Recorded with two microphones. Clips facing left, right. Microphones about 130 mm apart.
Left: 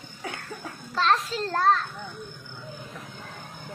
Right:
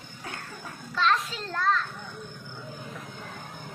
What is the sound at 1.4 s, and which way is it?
Speech, 40° left (ahead or behind).